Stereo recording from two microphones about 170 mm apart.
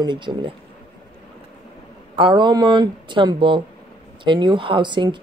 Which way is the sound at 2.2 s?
30° right (ahead or behind).